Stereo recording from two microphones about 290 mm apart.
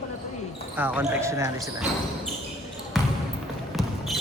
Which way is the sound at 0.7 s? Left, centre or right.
Centre.